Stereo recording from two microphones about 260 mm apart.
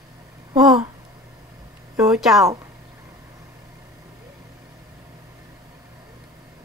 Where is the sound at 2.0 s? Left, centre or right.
Centre.